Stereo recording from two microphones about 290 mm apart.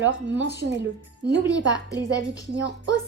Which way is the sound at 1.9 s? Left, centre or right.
Centre.